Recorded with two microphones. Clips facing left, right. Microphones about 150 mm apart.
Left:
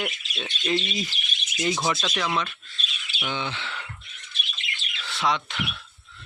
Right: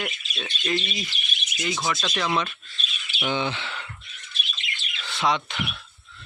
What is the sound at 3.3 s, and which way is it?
Speech, 15° right (ahead or behind).